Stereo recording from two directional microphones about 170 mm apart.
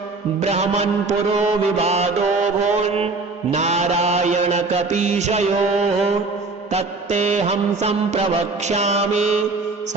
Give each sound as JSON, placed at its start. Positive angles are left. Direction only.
{"t": 0.4, "sound": "mantra", "side_deg": -40}